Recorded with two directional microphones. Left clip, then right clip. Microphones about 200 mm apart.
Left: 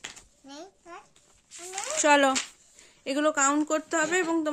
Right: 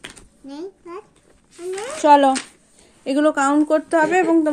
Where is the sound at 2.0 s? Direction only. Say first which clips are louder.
Right 9 dB; 20° left (ahead or behind).